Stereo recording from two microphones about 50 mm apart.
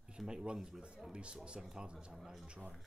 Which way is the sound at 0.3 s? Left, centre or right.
Centre.